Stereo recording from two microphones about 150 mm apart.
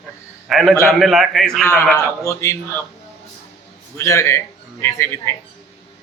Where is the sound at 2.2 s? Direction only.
20° left (ahead or behind).